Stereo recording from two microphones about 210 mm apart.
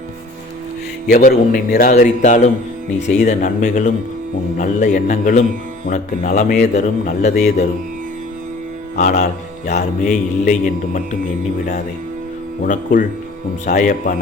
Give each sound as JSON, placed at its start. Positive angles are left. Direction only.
{"t": 1.1, "sound": "a man's voice", "side_deg": 45}
{"t": 9.0, "sound": "mantra", "side_deg": 40}
{"t": 9.7, "sound": "a man's voice", "side_deg": 40}
{"t": 12.6, "sound": "a man's voice", "side_deg": 40}